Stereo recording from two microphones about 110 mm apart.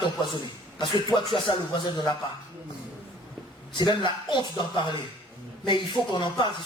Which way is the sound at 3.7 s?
45° left (ahead or behind).